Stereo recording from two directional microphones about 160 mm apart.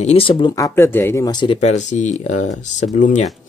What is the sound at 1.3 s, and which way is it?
Speech, 30° left (ahead or behind).